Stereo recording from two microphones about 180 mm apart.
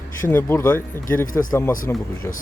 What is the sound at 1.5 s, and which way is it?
Speech, 15° left (ahead or behind).